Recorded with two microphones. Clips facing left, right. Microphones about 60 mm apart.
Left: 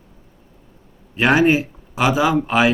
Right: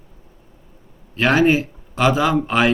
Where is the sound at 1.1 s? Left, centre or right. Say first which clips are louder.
Left 1 dB; centre.